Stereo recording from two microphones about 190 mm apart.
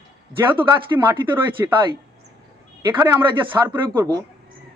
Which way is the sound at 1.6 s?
15° right (ahead or behind).